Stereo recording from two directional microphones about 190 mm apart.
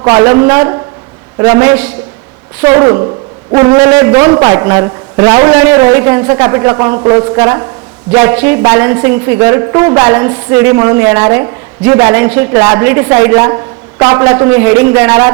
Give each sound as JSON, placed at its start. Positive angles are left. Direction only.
{"t": 0.0, "sound": "a woman's voice", "side_deg": -20}